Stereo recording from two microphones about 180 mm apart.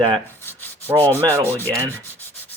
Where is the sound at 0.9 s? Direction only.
10° left (ahead or behind).